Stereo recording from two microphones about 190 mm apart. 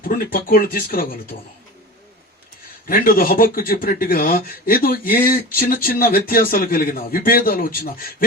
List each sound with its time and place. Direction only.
0.0 s speech: 50° left (ahead or behind)
2.8 s speech: 50° left (ahead or behind)